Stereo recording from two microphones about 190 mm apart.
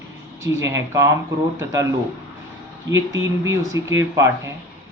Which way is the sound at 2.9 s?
15° right (ahead or behind).